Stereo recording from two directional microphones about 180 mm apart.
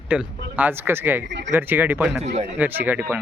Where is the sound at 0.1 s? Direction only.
10° right (ahead or behind).